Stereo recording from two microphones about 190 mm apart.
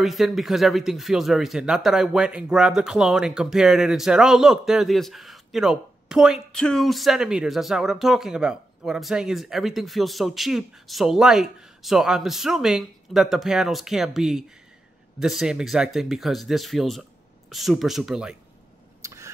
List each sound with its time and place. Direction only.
0.0 s speech: centre (ahead or behind)
18.9 s vehicle: 15° right (ahead or behind)